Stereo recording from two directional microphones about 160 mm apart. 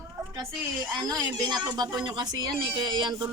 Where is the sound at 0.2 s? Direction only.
25° right (ahead or behind).